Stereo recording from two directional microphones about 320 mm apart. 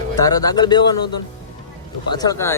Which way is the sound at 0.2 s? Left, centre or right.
Centre.